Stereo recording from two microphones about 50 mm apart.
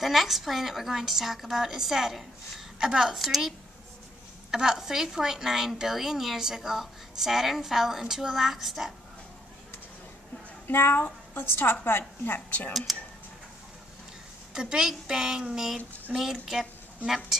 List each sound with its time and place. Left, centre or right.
0.0 s a woman's voice: centre
10.7 s a woman's voice: left
12.9 s a woman's voice: centre
14.5 s a woman's voice: centre